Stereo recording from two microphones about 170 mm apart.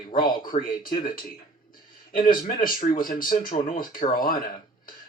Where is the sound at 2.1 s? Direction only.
55° left (ahead or behind).